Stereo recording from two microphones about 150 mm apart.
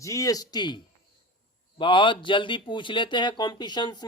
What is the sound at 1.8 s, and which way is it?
Speech, 35° left (ahead or behind).